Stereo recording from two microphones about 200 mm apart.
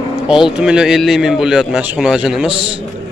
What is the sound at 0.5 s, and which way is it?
A man's voice, 5° right (ahead or behind).